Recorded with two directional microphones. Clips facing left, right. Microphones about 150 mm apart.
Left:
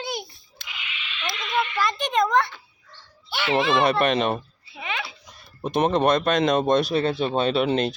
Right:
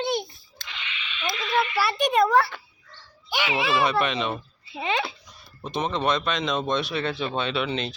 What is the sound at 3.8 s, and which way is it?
Speech, 50° left (ahead or behind).